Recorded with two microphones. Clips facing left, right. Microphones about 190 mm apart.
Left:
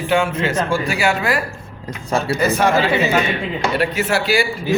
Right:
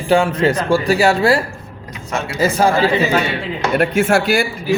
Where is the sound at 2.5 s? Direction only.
30° right (ahead or behind).